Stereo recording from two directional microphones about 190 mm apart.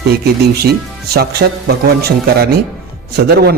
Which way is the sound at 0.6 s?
55° right (ahead or behind).